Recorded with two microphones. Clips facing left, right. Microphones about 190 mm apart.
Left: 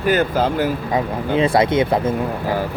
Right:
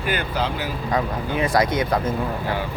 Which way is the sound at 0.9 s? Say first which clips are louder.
Left 1 dB; 25° left (ahead or behind).